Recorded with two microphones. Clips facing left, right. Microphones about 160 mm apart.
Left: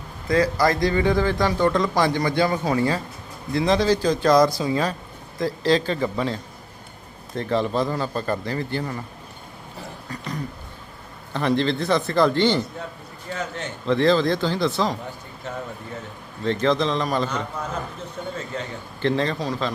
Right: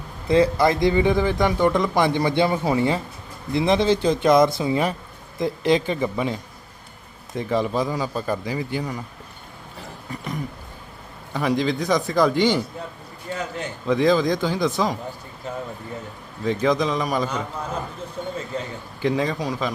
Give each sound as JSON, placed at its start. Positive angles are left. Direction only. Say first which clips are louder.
{"t": 0.3, "sound": "speech", "louder": "right 2 dB", "side_deg": -25}
{"t": 10.1, "sound": "a sound", "louder": "right 2 dB", "side_deg": -20}
{"t": 11.3, "sound": "speech", "louder": "even", "side_deg": -10}
{"t": 16.4, "sound": "speech", "louder": "even", "side_deg": -10}
{"t": 19.0, "sound": "speech", "louder": "even", "side_deg": -5}